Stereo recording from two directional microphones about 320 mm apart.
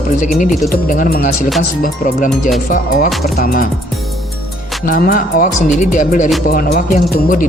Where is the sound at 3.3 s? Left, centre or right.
Left.